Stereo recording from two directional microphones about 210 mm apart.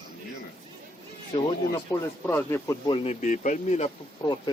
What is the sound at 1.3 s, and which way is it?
Music, 20° left (ahead or behind).